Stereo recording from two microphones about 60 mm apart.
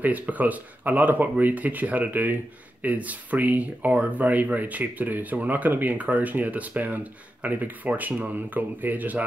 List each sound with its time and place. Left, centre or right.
0.0 s speech: right